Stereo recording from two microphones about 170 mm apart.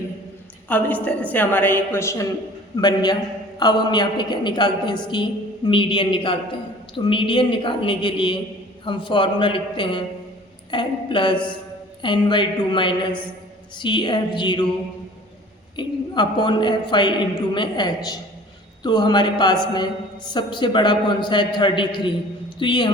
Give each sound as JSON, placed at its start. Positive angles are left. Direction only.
{"t": 0.7, "sound": "a woman's voice", "side_deg": 10}
{"t": 15.7, "sound": "a woman's voice", "side_deg": 25}